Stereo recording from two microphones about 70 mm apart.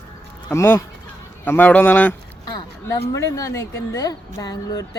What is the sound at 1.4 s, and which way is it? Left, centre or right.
Speech, left.